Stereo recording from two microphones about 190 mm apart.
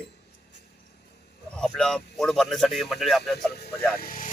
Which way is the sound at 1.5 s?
5° left (ahead or behind).